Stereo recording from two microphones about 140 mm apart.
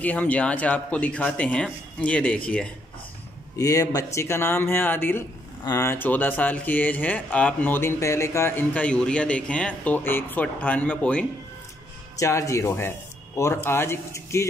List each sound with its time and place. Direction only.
0.0 s speech: 10° left (ahead or behind)
3.5 s speech: 25° left (ahead or behind)
12.2 s speech: 20° left (ahead or behind)